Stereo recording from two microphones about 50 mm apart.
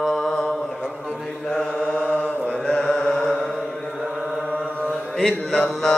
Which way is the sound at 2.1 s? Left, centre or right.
Left.